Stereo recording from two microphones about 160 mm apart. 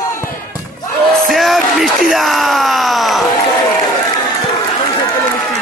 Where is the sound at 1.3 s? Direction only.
Centre (ahead or behind).